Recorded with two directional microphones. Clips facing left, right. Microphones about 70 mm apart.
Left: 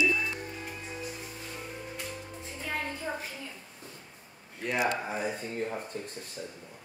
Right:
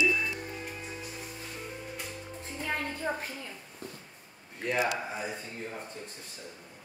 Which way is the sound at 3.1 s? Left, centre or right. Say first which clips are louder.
Right 5 dB; right.